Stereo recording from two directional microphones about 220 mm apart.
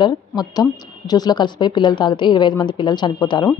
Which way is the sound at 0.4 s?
15° left (ahead or behind).